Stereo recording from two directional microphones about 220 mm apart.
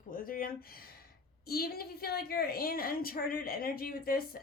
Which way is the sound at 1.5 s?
45° left (ahead or behind).